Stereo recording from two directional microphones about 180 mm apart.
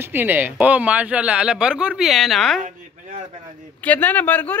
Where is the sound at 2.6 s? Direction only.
45° right (ahead or behind).